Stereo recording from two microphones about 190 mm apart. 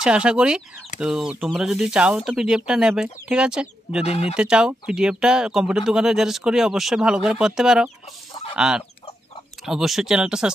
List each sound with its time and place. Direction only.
0.0 s speech: 5° right (ahead or behind)
4.0 s speech: 30° left (ahead or behind)
4.4 s speech: 5° right (ahead or behind)